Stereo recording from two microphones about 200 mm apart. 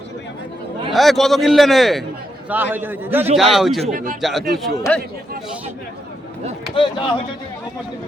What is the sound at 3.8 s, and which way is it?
Speech, 40° right (ahead or behind).